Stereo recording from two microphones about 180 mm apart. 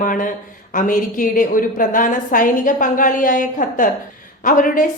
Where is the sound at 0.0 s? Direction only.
50° left (ahead or behind).